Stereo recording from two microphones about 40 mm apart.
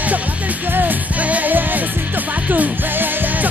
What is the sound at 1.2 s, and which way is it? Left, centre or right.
Music, right.